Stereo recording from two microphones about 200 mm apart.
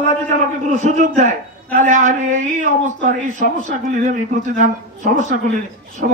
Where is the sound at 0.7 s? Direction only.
40° right (ahead or behind).